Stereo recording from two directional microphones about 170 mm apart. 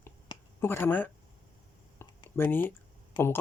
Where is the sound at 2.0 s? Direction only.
15° left (ahead or behind).